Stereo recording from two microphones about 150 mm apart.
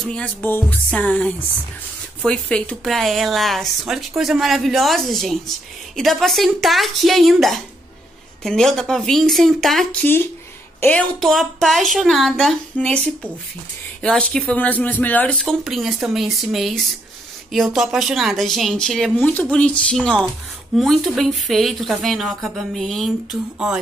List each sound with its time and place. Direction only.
0.0 s music: 5° left (ahead or behind)
2.2 s speech: 5° left (ahead or behind)
19.5 s music: 10° left (ahead or behind)
20.7 s speech: centre (ahead or behind)